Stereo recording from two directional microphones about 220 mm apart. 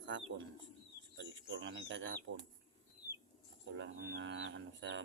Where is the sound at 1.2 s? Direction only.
55° right (ahead or behind).